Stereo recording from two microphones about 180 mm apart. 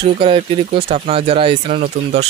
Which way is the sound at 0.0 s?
30° right (ahead or behind).